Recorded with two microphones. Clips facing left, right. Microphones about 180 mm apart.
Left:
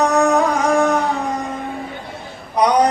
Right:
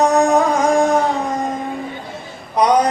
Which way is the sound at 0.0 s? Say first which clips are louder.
Right 2 dB; 35° right (ahead or behind).